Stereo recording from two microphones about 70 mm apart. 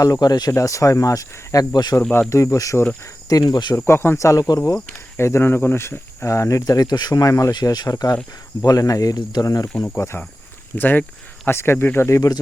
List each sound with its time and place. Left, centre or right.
0.0 s speech: left
0.6 s speech: left
1.7 s speech: left
2.0 s speech: left
2.3 s speech: left
3.2 s speech: left
3.8 s speech: left
4.2 s speech: left
5.1 s speech: left
6.2 s speech: left
7.5 s speech: left
9.4 s speech: left
10.8 s speech: left